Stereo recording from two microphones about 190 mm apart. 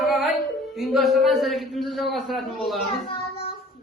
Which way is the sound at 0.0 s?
Centre (ahead or behind).